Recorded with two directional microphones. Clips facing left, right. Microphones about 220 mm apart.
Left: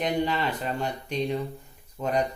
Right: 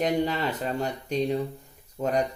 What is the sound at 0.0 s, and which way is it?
Speech, 40° right (ahead or behind).